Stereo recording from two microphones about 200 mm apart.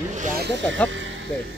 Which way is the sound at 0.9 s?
70° right (ahead or behind).